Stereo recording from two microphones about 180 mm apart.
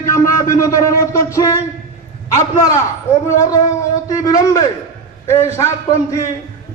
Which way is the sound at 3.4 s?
20° left (ahead or behind).